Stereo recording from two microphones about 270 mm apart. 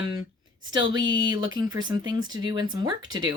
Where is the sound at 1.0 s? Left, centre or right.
Right.